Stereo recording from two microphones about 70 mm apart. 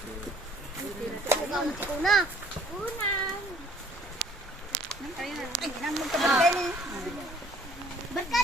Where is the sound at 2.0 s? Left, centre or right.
Centre.